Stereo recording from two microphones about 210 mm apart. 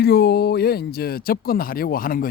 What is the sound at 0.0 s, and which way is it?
Speech, 50° left (ahead or behind).